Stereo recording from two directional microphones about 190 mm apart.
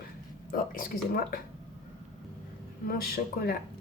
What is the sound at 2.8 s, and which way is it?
Speech, 50° left (ahead or behind).